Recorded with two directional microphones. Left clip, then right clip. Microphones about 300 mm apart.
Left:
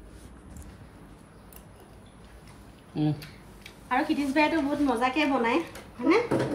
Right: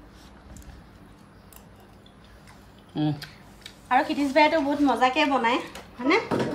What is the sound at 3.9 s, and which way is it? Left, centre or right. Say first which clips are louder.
A woman's voice: right 4 dB; right.